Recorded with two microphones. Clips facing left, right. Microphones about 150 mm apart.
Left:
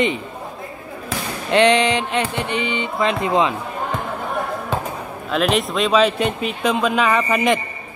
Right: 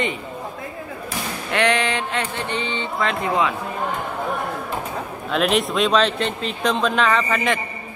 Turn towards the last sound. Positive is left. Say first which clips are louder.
# left 3 dB
turn(degrees=15)  # may be behind; listen again after turning